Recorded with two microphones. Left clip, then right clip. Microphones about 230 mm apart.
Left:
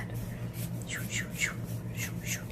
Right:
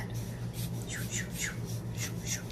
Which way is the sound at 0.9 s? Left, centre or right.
Left.